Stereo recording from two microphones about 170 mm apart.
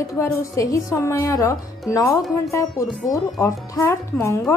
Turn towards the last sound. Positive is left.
turn(degrees=15)  # may be behind; listen again after turning